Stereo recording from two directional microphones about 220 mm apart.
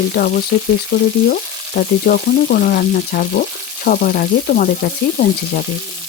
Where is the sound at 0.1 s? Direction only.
45° left (ahead or behind).